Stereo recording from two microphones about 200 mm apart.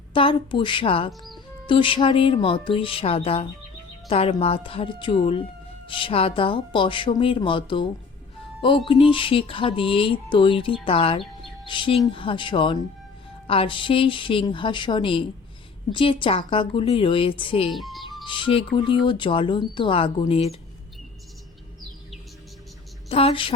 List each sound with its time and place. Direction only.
0.1 s music: 25° left (ahead or behind)
17.7 s music: centre (ahead or behind)
18.3 s music: 25° left (ahead or behind)
23.0 s music: 30° left (ahead or behind)